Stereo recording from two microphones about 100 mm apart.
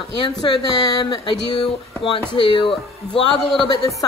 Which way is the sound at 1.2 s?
50° left (ahead or behind).